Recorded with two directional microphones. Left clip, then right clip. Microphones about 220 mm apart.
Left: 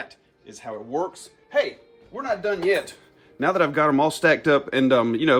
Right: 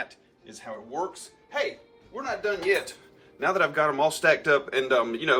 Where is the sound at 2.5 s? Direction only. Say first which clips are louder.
Left 2 dB; 45° left (ahead or behind).